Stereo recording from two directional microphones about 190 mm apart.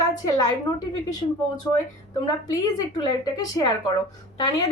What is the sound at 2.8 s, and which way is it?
Speech, 20° left (ahead or behind).